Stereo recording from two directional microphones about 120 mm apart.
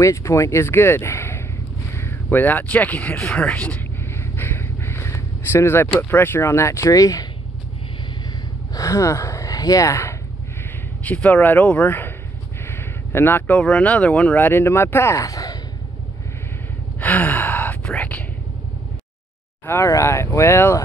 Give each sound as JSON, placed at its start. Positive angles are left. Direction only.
{"t": 0.0, "sound": "speech", "side_deg": 25}
{"t": 8.7, "sound": "speech", "side_deg": 25}
{"t": 11.1, "sound": "speech", "side_deg": 10}
{"t": 17.0, "sound": "gasp", "side_deg": 15}
{"t": 19.6, "sound": "speech", "side_deg": 20}